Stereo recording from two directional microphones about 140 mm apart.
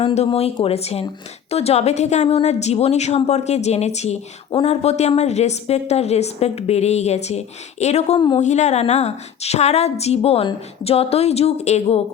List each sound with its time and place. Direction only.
0.0 s a woman's voice: 45° left (ahead or behind)